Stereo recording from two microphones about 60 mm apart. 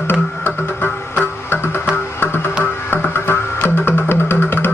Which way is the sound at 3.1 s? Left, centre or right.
Left.